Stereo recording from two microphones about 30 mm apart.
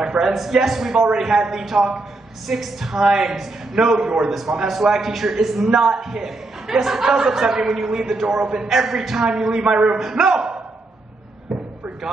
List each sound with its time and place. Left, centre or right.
0.2 s a man's voice: centre
4.6 s a man's voice: centre; by 8.6 s right
8.6 s a man's voice: centre
9.3 s speech: right
9.9 s a man's voice: centre